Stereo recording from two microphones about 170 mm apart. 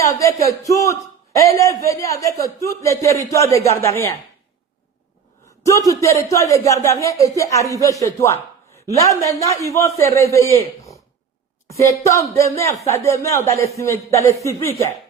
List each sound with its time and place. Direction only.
0.0 s a man's voice: 20° left (ahead or behind)
5.6 s speech: 20° left (ahead or behind)
8.0 s a sound: 15° left (ahead or behind)
9.0 s a man's voice: 20° left (ahead or behind)